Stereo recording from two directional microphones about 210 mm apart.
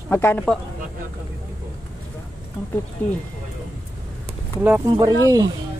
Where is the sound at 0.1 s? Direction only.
10° left (ahead or behind).